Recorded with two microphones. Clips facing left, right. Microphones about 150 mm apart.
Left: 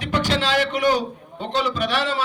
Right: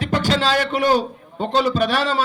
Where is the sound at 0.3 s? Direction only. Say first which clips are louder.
Right 3 dB; 45° right (ahead or behind).